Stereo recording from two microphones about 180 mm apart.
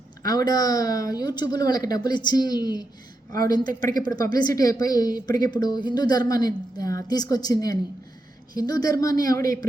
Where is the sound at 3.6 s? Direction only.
50° right (ahead or behind).